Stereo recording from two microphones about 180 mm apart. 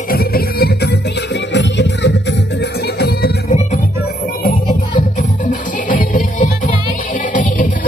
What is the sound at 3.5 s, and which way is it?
Music, 40° left (ahead or behind).